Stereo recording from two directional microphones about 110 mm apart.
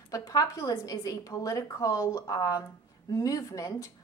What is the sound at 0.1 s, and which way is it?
Speech, 30° left (ahead or behind).